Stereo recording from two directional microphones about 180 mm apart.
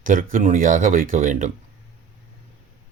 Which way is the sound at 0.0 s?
50° right (ahead or behind).